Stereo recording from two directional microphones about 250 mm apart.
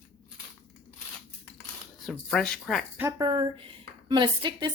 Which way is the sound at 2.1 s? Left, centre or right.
Centre.